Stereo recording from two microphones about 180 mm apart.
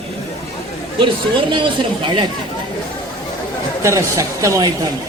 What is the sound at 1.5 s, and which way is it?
Speech, 25° right (ahead or behind).